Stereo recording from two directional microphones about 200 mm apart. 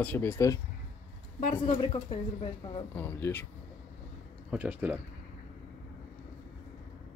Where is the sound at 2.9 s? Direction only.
10° left (ahead or behind).